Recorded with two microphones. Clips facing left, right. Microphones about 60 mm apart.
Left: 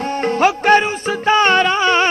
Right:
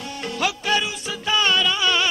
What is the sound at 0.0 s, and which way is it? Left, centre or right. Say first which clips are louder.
Music: left 10 dB; left.